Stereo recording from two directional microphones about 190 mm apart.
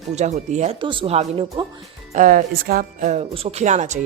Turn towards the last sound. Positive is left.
turn(degrees=-40)  # may be behind; listen again after turning